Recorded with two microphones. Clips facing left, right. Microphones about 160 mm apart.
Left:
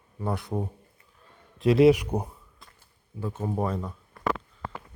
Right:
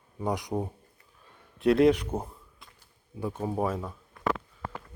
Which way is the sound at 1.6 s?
Centre (ahead or behind).